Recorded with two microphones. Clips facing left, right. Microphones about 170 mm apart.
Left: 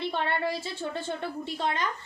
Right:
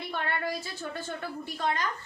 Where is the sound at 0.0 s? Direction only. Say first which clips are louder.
Left 4 dB; 25° left (ahead or behind).